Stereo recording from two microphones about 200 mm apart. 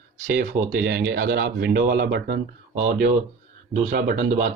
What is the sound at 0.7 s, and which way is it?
Speech, 55° right (ahead or behind).